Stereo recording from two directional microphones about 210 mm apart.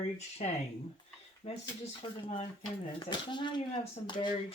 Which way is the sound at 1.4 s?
25° left (ahead or behind).